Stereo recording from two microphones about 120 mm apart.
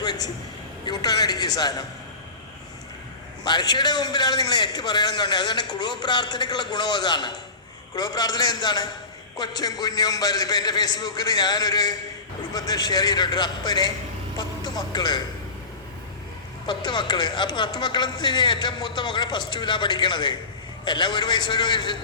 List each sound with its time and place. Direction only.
0.0 s a sound: 35° left (ahead or behind)
0.9 s a man's voice: 35° left (ahead or behind)
3.4 s a man's voice: 35° left (ahead or behind)
16.6 s a man's voice: 40° left (ahead or behind)